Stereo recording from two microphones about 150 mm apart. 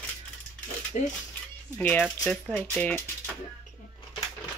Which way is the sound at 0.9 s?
55° left (ahead or behind).